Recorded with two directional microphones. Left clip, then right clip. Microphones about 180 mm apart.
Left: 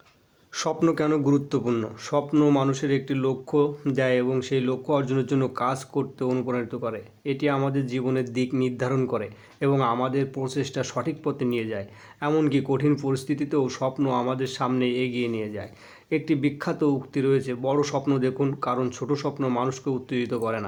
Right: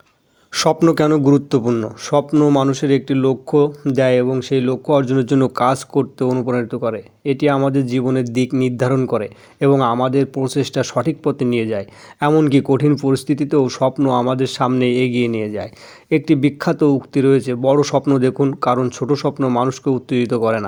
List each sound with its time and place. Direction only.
0.5 s a man's voice: 40° right (ahead or behind)